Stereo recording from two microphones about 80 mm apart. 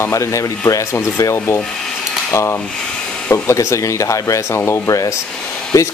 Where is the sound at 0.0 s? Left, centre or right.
Left.